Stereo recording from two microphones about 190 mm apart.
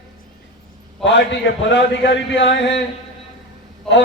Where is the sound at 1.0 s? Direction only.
70° left (ahead or behind).